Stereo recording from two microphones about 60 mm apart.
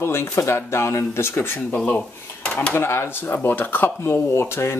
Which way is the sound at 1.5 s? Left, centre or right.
Left.